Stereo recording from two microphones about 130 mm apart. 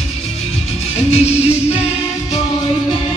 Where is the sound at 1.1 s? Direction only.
55° left (ahead or behind).